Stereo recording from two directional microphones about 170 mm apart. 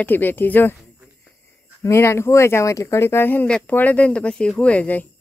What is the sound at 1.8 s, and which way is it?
Speech, 15° left (ahead or behind).